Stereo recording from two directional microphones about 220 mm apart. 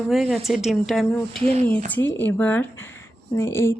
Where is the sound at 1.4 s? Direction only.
25° right (ahead or behind).